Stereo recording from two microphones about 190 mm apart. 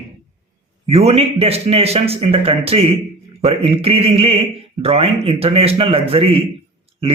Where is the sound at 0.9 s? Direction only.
30° right (ahead or behind).